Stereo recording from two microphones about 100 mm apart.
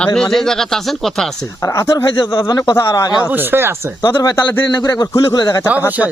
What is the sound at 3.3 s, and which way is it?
Speech, 20° right (ahead or behind).